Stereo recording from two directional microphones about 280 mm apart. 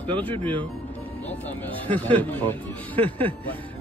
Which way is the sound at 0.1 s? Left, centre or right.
Centre.